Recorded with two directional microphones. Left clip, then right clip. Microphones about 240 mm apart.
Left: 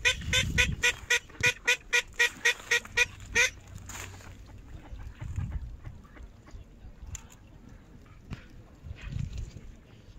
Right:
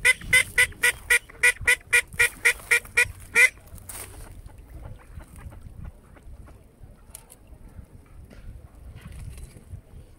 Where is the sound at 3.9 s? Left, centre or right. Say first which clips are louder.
Even; right.